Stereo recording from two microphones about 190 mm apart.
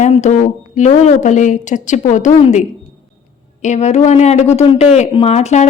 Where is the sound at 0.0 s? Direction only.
40° left (ahead or behind).